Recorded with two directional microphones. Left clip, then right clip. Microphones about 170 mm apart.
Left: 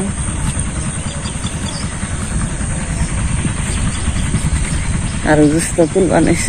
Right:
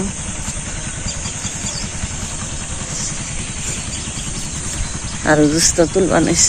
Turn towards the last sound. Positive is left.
turn(degrees=-15)  # may be behind; listen again after turning